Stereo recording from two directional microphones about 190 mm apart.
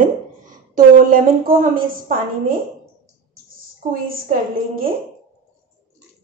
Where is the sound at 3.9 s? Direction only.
50° right (ahead or behind).